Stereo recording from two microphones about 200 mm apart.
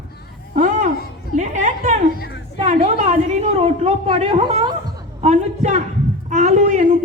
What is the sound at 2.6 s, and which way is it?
A woman's voice, 30° right (ahead or behind).